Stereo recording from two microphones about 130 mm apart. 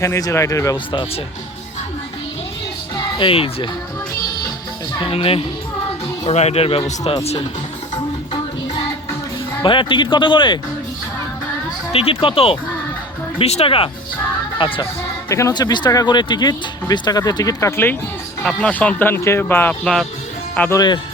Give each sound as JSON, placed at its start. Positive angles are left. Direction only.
{"t": 0.0, "sound": "speech", "side_deg": 25}
{"t": 2.9, "sound": "music", "side_deg": 40}
{"t": 4.9, "sound": "speech", "side_deg": 45}
{"t": 9.6, "sound": "speech", "side_deg": 40}
{"t": 11.9, "sound": "speech", "side_deg": 50}
{"t": 15.3, "sound": "speech", "side_deg": 25}
{"t": 20.6, "sound": "speech", "side_deg": 20}